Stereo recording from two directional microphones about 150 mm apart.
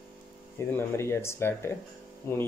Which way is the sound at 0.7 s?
15° left (ahead or behind).